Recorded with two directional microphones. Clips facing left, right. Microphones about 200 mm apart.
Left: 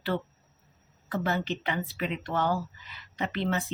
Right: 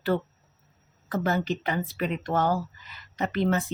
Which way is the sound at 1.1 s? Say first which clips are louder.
Right 3 dB; 40° right (ahead or behind).